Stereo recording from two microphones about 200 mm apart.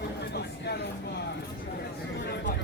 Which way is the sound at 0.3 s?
55° left (ahead or behind).